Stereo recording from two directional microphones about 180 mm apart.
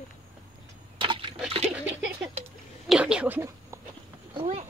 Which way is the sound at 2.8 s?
5° right (ahead or behind).